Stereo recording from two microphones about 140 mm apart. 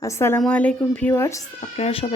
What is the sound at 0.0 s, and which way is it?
Speech, 20° left (ahead or behind).